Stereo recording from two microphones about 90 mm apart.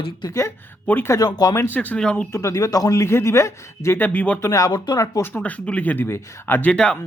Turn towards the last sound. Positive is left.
turn(degrees=10)  # may be behind; listen again after turning